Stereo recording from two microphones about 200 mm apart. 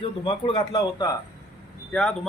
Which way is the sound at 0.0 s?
25° left (ahead or behind).